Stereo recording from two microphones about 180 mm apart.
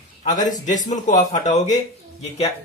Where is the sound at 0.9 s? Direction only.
45° left (ahead or behind).